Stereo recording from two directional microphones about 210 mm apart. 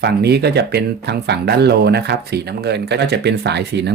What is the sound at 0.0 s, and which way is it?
Speech, 50° right (ahead or behind).